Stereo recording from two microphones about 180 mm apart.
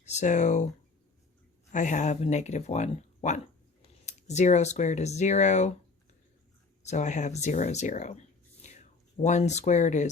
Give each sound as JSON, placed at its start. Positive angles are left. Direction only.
{"t": 0.0, "sound": "speech", "side_deg": 40}
{"t": 1.7, "sound": "speech", "side_deg": 45}
{"t": 6.8, "sound": "speech", "side_deg": 40}